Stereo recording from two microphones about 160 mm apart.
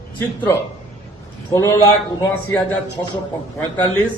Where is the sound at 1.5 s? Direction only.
20° left (ahead or behind).